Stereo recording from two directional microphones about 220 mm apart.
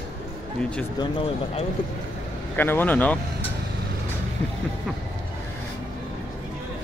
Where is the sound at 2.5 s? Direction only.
10° left (ahead or behind).